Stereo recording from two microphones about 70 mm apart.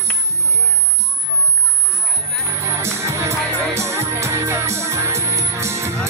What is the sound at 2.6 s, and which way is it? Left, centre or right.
Music, right.